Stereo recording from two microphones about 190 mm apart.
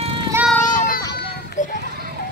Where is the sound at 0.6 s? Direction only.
45° left (ahead or behind).